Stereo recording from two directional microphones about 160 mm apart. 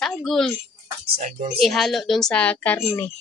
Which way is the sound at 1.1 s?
55° right (ahead or behind).